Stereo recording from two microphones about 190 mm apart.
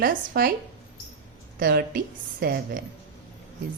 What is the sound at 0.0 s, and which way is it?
Speech, 50° right (ahead or behind).